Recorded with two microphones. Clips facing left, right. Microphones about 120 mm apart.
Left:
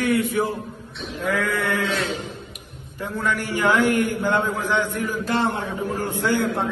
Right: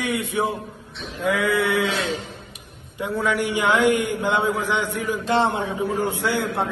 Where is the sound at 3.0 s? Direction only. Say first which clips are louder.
Right 3 dB; 15° right (ahead or behind).